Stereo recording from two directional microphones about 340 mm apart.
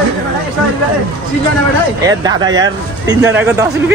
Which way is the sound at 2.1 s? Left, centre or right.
Centre.